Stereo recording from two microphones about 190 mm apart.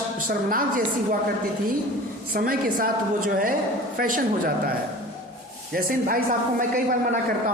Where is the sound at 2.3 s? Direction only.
50° right (ahead or behind).